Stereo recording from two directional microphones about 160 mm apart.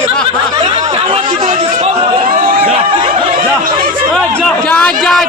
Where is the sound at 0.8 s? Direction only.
45° right (ahead or behind).